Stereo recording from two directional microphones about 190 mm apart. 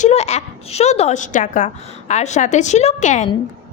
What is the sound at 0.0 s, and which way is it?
A woman's voice, 35° left (ahead or behind).